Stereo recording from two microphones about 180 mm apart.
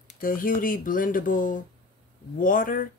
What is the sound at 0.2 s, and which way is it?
A woman's voice, 50° left (ahead or behind).